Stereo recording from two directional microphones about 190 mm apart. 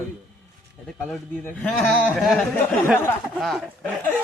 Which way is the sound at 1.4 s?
5° left (ahead or behind).